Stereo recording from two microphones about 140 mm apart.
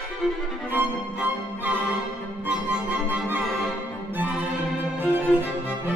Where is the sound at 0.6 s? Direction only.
10° right (ahead or behind).